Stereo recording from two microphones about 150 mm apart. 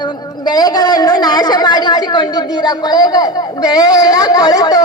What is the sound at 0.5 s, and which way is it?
A woman's voice, 25° left (ahead or behind).